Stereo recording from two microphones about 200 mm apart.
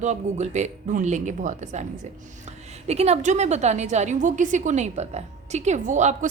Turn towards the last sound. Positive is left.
turn(degrees=-35)  # may be behind; listen again after turning